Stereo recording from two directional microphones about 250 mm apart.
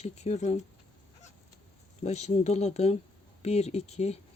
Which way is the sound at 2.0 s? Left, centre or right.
Left.